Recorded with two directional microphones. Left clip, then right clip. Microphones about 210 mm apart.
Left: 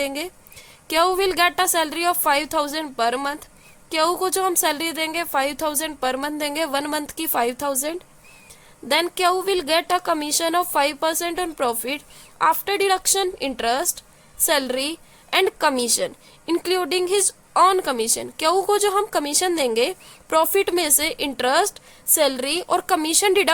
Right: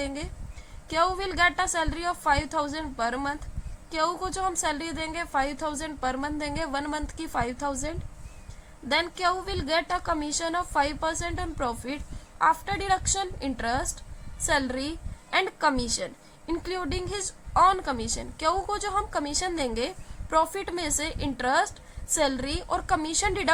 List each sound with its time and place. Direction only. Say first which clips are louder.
0.0 s a woman's voice: left 8 dB; 55° left (ahead or behind)